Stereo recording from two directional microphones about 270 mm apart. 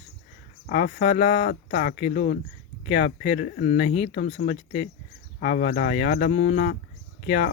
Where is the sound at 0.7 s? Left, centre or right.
Left.